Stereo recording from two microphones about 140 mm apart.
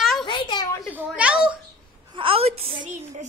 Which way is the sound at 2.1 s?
40° right (ahead or behind).